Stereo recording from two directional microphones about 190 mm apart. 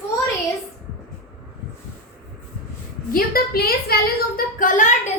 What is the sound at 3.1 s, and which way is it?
Speech, 50° left (ahead or behind).